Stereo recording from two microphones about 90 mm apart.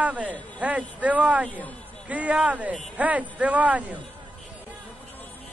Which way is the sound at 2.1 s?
15° right (ahead or behind).